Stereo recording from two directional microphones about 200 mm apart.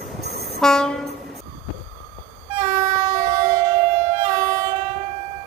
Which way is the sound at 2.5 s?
30° right (ahead or behind).